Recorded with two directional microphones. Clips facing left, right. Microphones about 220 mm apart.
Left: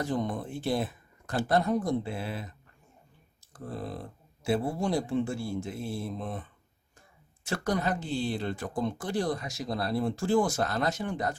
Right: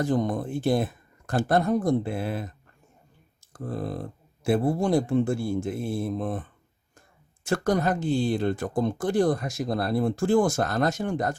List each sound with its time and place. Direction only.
0.0 s speech: 45° right (ahead or behind)
4.4 s speech: 50° right (ahead or behind)